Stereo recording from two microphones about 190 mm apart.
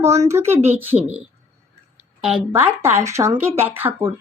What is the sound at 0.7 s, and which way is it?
Speech, 10° right (ahead or behind).